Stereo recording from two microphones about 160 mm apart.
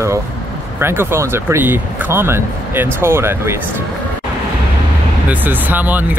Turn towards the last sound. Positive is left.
turn(degrees=-10)  # may be behind; listen again after turning